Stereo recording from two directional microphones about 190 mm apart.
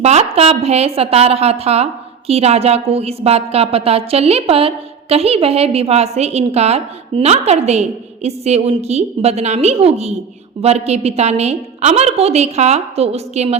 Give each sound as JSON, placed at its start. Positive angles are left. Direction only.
{"t": 0.0, "sound": "a woman's voice", "side_deg": -35}